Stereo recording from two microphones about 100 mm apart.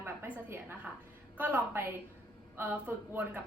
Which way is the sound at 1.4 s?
20° right (ahead or behind).